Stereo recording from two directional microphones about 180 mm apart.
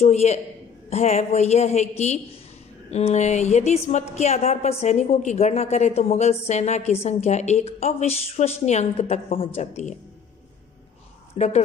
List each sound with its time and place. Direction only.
0.0 s a woman's voice: 40° left (ahead or behind)
11.3 s a woman's voice: 40° left (ahead or behind)